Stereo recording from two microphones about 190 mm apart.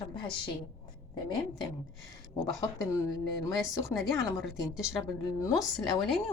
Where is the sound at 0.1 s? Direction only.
25° left (ahead or behind).